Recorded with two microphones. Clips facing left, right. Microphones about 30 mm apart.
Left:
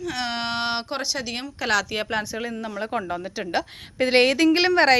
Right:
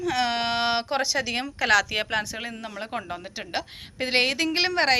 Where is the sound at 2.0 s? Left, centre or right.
Right.